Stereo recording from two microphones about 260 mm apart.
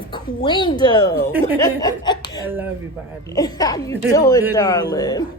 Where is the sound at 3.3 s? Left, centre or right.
Centre.